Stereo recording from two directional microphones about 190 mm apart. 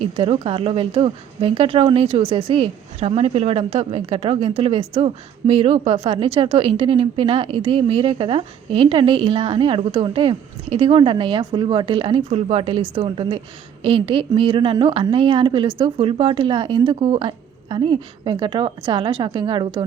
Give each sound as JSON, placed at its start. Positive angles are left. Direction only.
{"t": 0.0, "sound": "speech", "side_deg": -30}